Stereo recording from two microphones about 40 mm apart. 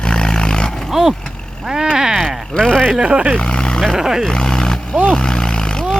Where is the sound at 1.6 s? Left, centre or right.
Centre.